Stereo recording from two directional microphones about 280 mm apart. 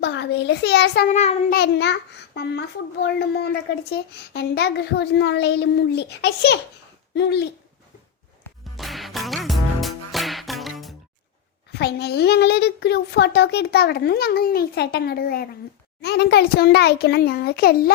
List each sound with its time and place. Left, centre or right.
0.0 s a child's voice: left
8.7 s music: centre
11.7 s a child's voice: left